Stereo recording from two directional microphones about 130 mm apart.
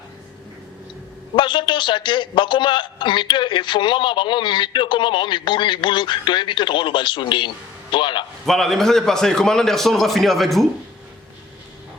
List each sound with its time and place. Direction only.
1.4 s a man's voice: 40° left (ahead or behind)
8.4 s a man's voice: centre (ahead or behind)